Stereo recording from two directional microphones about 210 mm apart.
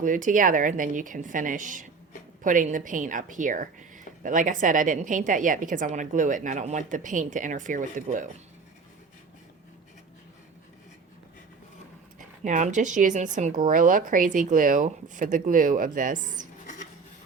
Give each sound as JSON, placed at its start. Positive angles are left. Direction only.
{"t": 0.0, "sound": "a woman's voice", "side_deg": -40}
{"t": 12.5, "sound": "a woman's voice", "side_deg": -35}
{"t": 16.6, "sound": "a sound", "side_deg": 35}